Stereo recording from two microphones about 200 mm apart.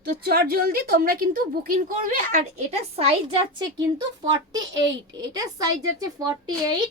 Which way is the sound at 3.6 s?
20° right (ahead or behind).